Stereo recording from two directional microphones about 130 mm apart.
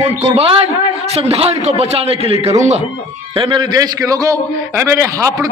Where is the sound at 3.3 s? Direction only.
35° right (ahead or behind).